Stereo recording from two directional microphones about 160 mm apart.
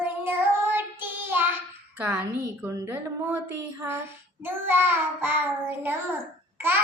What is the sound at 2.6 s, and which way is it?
Speech, 15° right (ahead or behind).